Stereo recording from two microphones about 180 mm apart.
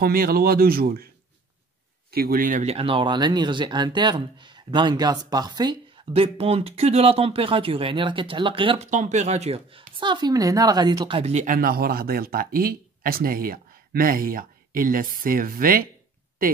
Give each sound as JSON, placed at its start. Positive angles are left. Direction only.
{"t": 0.0, "sound": "speech", "side_deg": -55}
{"t": 2.0, "sound": "speech", "side_deg": -55}
{"t": 2.6, "sound": "speech", "side_deg": -30}